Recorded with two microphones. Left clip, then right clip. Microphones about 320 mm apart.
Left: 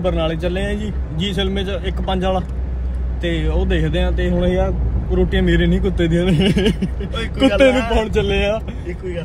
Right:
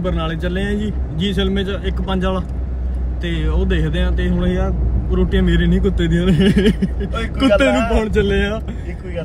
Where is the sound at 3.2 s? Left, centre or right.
Left.